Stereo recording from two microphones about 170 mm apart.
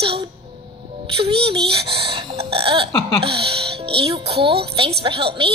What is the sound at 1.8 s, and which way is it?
Speech, 70° right (ahead or behind).